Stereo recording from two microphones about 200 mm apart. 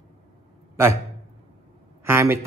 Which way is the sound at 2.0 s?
15° right (ahead or behind).